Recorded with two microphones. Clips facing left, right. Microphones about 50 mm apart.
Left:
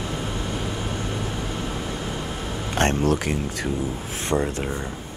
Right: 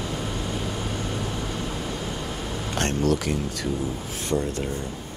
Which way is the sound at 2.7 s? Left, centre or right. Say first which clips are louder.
Left 3 dB; left.